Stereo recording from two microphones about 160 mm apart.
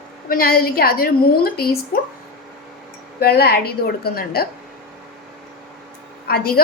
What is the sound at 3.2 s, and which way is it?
A woman's voice, 75° left (ahead or behind).